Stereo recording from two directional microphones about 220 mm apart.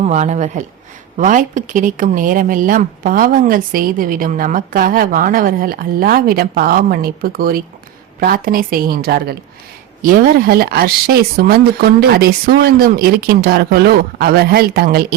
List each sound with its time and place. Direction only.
0.0 s speech: 30° right (ahead or behind)